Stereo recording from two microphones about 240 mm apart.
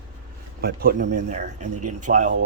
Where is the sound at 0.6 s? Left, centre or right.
Right.